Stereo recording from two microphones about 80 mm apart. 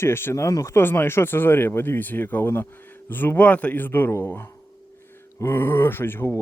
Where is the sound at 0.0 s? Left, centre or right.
Left.